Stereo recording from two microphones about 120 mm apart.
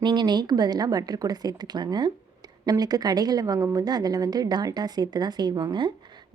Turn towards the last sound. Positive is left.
turn(degrees=-35)  # may be behind; listen again after turning